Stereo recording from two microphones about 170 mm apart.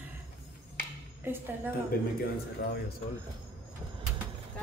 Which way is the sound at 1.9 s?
60° left (ahead or behind).